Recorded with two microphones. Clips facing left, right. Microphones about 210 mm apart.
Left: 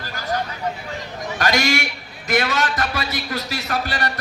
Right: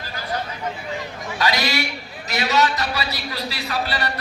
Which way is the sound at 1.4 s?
45° left (ahead or behind).